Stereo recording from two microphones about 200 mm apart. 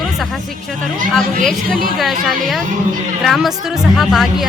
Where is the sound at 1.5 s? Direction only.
Centre (ahead or behind).